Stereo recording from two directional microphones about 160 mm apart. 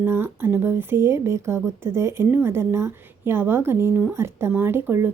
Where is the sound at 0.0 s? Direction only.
10° right (ahead or behind).